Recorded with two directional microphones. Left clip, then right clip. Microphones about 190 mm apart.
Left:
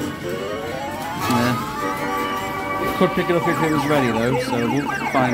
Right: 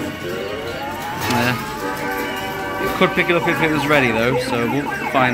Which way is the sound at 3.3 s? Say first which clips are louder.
Right 2 dB; 20° left (ahead or behind).